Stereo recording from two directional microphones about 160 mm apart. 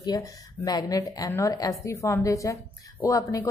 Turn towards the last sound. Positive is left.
turn(degrees=20)  # may be behind; listen again after turning